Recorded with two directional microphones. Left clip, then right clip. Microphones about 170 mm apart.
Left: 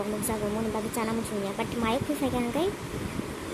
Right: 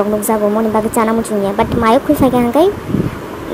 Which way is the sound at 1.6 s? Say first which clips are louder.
Right 18 dB; 20° right (ahead or behind).